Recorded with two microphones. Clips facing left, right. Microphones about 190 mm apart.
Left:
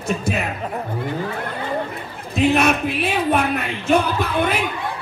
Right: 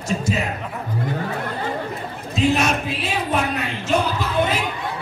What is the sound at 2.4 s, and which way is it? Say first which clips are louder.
A man's voice: left 3 dB; 60° left (ahead or behind).